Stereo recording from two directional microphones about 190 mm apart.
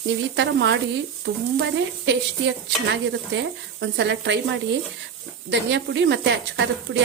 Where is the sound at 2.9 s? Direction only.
70° right (ahead or behind).